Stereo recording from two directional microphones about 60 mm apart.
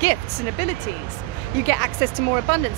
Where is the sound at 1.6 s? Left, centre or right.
Right.